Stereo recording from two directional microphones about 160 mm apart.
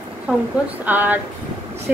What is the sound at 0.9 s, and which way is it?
Speech, 10° right (ahead or behind).